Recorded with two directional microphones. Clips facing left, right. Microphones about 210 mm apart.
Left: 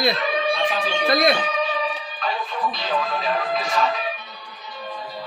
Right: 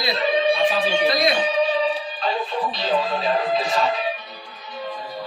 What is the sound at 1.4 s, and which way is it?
Music, 30° right (ahead or behind).